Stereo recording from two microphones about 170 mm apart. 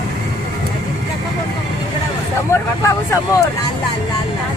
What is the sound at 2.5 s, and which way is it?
Vehicle, 15° left (ahead or behind).